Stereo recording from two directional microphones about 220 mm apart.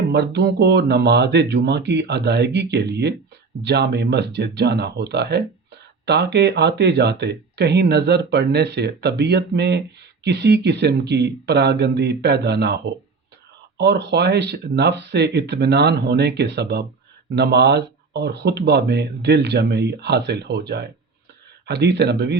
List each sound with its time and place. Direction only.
0.1 s speech: 50° right (ahead or behind)